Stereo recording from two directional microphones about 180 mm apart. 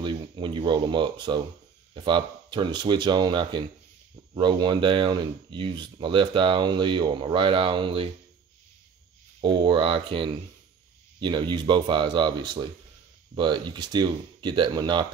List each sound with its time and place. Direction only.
0.0 s speech: 25° right (ahead or behind)
9.4 s speech: 25° right (ahead or behind)